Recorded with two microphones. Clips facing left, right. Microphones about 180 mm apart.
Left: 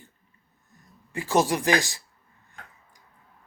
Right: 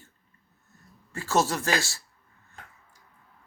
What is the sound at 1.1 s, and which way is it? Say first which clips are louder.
Speech: left 3 dB; 15° left (ahead or behind).